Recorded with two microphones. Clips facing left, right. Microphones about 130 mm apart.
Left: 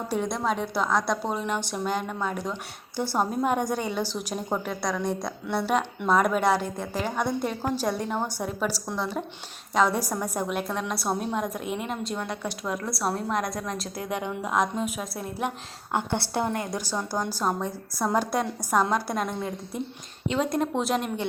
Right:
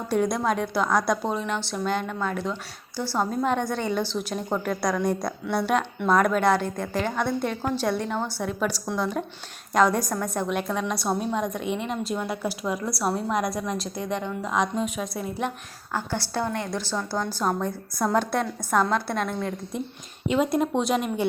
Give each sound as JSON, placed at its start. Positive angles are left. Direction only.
{"t": 0.1, "sound": "a woman's voice", "side_deg": 0}
{"t": 15.9, "sound": "a woman's voice", "side_deg": 25}
{"t": 17.4, "sound": "a woman's voice", "side_deg": 0}
{"t": 20.2, "sound": "a woman's voice", "side_deg": -10}